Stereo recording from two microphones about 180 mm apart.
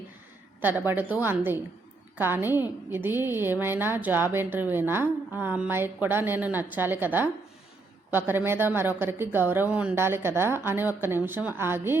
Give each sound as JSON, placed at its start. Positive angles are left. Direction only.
{"t": 0.6, "sound": "a woman's voice", "side_deg": -10}